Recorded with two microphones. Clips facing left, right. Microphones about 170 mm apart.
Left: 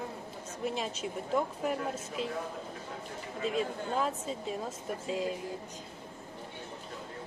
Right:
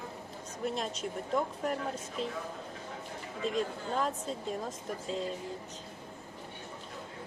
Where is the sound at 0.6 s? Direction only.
Centre (ahead or behind).